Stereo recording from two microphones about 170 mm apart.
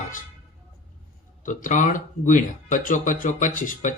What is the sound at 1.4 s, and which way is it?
Speech, 50° left (ahead or behind).